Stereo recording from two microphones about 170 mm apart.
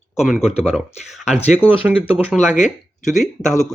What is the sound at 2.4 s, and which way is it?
Speech, 45° left (ahead or behind).